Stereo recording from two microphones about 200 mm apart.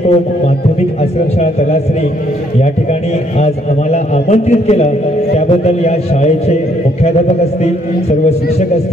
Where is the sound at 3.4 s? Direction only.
35° left (ahead or behind).